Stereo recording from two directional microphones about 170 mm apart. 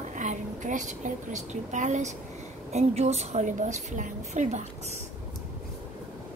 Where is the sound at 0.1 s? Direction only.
45° right (ahead or behind).